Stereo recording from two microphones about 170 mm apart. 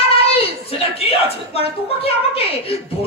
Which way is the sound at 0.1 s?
35° left (ahead or behind).